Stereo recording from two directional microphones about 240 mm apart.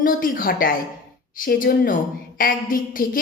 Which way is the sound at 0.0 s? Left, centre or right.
Left.